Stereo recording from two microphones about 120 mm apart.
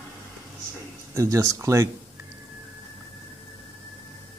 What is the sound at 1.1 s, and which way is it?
Speech, 25° right (ahead or behind).